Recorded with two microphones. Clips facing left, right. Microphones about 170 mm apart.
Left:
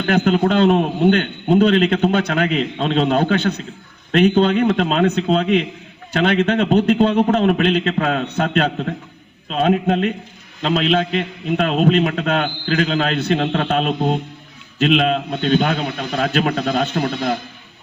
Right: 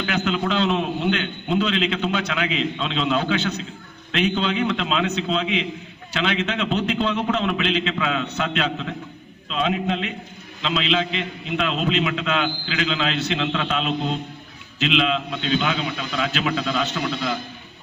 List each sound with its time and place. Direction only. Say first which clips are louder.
0.0 s a man's voice: left 7 dB; 50° left (ahead or behind)